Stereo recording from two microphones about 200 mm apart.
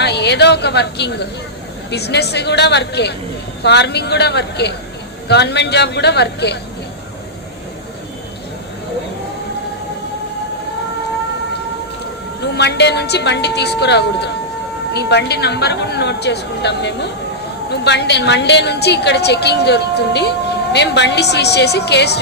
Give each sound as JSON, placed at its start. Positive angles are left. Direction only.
{"t": 0.0, "sound": "a woman's voice", "side_deg": 55}
{"t": 12.4, "sound": "a woman's voice", "side_deg": 55}